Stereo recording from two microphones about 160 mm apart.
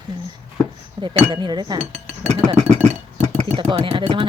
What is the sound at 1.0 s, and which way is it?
Speech, 30° right (ahead or behind).